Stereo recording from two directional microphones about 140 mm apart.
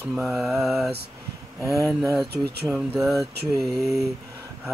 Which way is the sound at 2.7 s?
Centre (ahead or behind).